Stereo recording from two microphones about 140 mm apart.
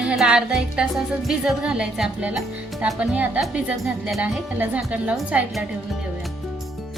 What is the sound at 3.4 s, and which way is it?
Speech, 5° right (ahead or behind).